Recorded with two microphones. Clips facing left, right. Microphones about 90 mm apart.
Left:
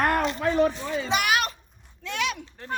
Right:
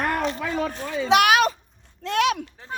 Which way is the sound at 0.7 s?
65° right (ahead or behind).